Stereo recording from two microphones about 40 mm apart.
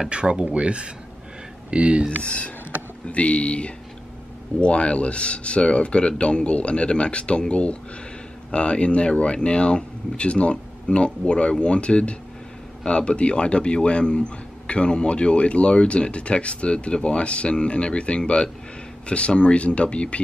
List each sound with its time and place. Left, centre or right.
0.1 s speech: right
2.0 s speech: left